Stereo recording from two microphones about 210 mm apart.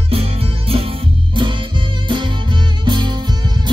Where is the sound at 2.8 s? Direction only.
20° right (ahead or behind).